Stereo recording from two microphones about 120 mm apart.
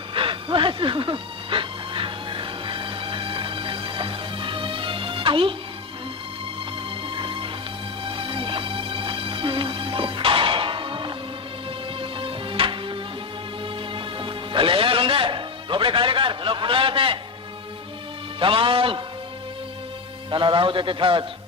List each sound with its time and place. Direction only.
0.1 s music: 45° right (ahead or behind)
7.2 s music: 45° right (ahead or behind)
18.3 s music: 45° right (ahead or behind)
20.3 s a sound: 45° right (ahead or behind)